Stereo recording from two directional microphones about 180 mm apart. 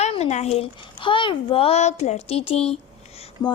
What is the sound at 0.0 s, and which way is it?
A child's voice, 35° left (ahead or behind).